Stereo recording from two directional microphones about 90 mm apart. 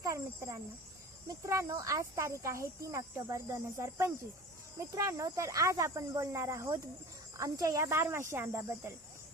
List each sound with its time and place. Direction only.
0.0 s speech: 35° right (ahead or behind)